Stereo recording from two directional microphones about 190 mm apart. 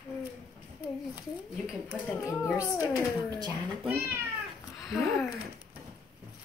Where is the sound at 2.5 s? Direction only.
15° left (ahead or behind).